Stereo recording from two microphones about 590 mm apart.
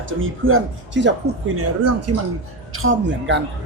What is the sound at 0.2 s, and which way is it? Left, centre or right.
Speech, centre.